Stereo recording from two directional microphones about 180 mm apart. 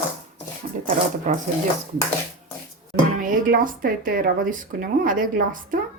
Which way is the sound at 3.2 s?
50° right (ahead or behind).